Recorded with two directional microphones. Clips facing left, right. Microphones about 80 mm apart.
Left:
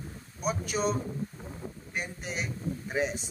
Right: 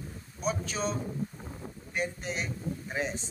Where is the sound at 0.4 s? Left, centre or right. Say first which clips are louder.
Left 2 dB; centre.